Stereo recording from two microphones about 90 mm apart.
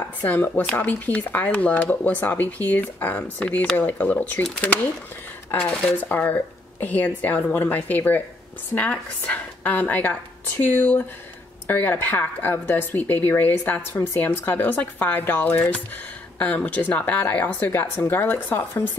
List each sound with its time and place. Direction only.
0.2 s speech: 20° left (ahead or behind)
5.5 s speech: 15° left (ahead or behind)